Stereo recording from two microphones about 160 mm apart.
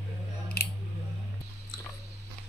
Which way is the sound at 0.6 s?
75° left (ahead or behind).